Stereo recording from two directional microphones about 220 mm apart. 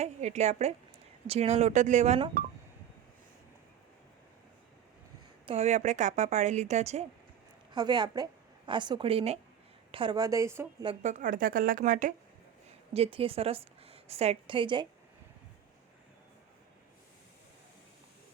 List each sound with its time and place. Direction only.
0.0 s a woman's voice: 30° right (ahead or behind)
5.5 s a woman's voice: 30° right (ahead or behind)
7.7 s a woman's voice: 20° right (ahead or behind)
11.0 s a woman's voice: 35° right (ahead or behind)